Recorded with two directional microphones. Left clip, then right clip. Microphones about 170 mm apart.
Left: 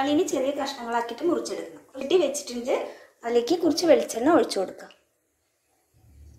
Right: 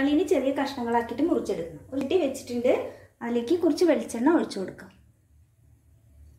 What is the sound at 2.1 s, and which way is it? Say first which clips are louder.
A woman's voice: left 4 dB; 55° left (ahead or behind).